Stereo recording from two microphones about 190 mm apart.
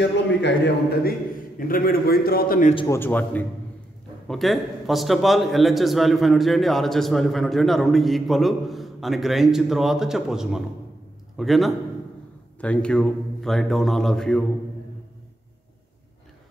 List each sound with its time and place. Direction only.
0.0 s a man's voice: 65° left (ahead or behind)
1.7 s a man's voice: 50° left (ahead or behind)
2.9 s a man's voice: 10° left (ahead or behind)